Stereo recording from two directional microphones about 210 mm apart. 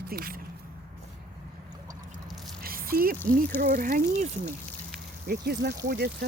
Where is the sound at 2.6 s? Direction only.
45° right (ahead or behind).